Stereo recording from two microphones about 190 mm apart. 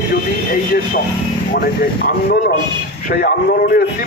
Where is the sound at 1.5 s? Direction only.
55° left (ahead or behind).